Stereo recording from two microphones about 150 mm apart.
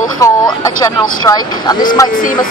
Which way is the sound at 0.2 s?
25° left (ahead or behind).